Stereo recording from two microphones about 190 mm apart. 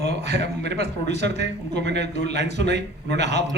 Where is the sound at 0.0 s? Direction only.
60° right (ahead or behind).